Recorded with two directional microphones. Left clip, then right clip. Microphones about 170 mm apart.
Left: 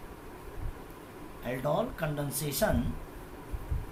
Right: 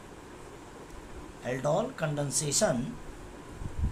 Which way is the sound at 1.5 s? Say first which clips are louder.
Right 2 dB; 40° right (ahead or behind).